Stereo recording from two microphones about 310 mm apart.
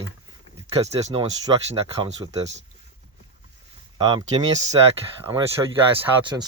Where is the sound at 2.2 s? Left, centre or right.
Centre.